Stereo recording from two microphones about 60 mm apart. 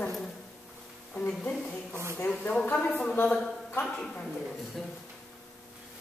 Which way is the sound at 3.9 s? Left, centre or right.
Centre.